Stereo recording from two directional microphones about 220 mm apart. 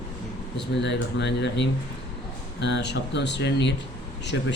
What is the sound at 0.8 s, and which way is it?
Speech, 50° left (ahead or behind).